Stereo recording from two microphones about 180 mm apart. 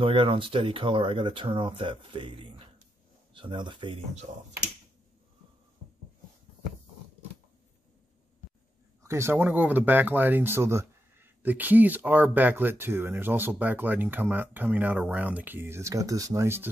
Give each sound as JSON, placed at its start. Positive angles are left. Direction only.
{"t": 0.0, "sound": "speech", "side_deg": -30}
{"t": 9.0, "sound": "speech", "side_deg": -15}